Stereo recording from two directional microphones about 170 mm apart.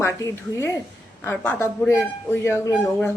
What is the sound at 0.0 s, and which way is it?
Speech, 15° left (ahead or behind).